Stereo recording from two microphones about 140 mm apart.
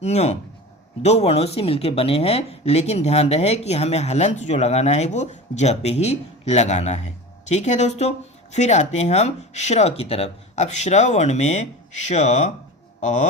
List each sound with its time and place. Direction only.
0.0 s speech: 50° left (ahead or behind)